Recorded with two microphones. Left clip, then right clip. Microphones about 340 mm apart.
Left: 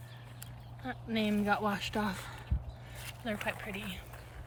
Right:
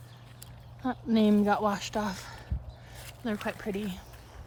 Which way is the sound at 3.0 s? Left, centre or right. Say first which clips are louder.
Right 3 dB; centre.